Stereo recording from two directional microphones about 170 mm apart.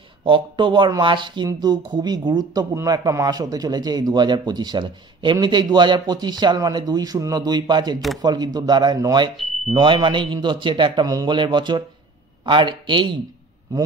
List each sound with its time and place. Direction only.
0.2 s a man's voice: 30° right (ahead or behind)